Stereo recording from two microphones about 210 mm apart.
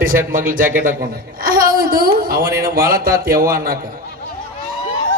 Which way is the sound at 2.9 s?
45° right (ahead or behind).